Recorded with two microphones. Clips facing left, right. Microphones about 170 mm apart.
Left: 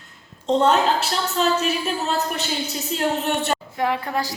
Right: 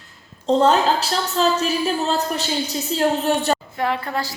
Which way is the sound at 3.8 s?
15° left (ahead or behind).